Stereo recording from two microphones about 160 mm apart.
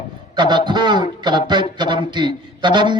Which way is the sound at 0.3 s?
30° right (ahead or behind).